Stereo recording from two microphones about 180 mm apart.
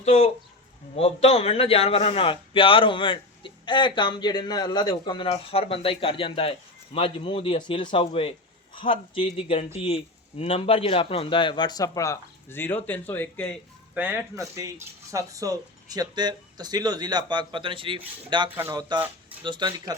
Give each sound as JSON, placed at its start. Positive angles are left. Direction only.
{"t": 0.0, "sound": "a man's voice", "side_deg": 35}
{"t": 13.9, "sound": "speech", "side_deg": -10}
{"t": 18.4, "sound": "speech", "side_deg": -10}
{"t": 19.4, "sound": "speech", "side_deg": -25}